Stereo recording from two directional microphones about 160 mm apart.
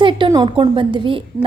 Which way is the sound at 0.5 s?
30° right (ahead or behind).